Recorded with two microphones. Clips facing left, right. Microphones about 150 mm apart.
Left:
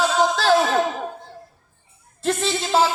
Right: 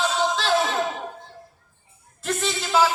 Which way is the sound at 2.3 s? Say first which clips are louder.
Left 4 dB; 30° left (ahead or behind).